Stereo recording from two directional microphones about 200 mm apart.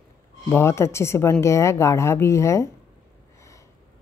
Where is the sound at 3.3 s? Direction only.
15° left (ahead or behind).